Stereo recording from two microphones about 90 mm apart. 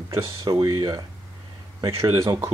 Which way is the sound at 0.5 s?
45° right (ahead or behind).